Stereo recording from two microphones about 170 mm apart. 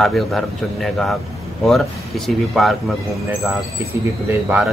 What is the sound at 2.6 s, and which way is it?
Speech, centre (ahead or behind).